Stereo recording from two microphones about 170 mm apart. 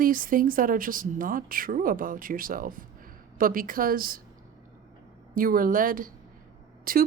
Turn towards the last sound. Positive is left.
turn(degrees=-55)  # may be behind; listen again after turning